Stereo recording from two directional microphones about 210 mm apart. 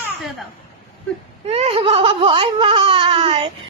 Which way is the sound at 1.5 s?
30° right (ahead or behind).